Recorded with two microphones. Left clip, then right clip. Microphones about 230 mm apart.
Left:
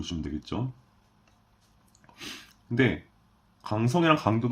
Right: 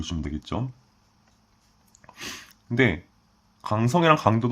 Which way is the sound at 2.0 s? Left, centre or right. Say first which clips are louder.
Right 4 dB; right.